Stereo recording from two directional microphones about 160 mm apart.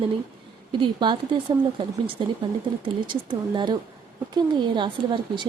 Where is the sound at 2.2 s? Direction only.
30° right (ahead or behind).